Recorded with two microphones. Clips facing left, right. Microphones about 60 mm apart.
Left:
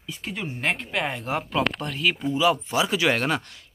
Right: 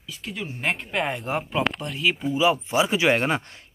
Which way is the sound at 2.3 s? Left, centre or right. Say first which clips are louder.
Right 2 dB; right.